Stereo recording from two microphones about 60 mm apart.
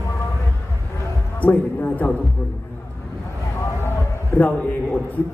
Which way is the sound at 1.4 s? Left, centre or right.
Left.